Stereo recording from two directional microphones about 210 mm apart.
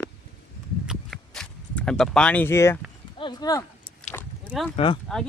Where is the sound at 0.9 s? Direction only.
Centre (ahead or behind).